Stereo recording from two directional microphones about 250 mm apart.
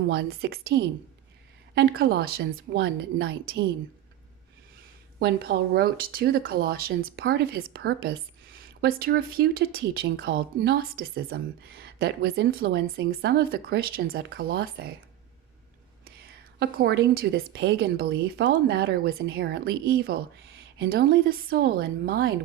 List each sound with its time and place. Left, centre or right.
0.1 s a woman's voice: right
5.2 s speech: right
16.6 s speech: right